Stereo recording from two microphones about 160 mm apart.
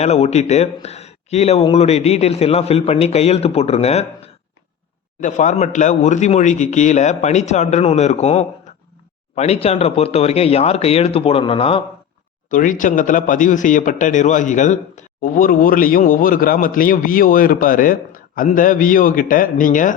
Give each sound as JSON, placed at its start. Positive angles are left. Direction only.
{"t": 0.0, "sound": "a man's voice", "side_deg": 40}
{"t": 12.5, "sound": "a man's voice", "side_deg": 55}